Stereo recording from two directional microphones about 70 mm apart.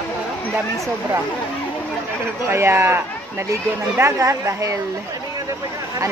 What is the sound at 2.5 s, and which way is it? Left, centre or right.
Speech, right.